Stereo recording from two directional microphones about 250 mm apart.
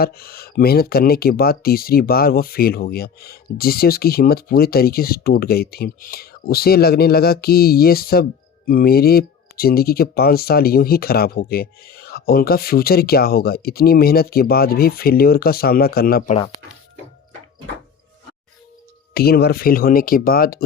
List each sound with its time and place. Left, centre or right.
0.0 s speech: left
19.1 s speech: left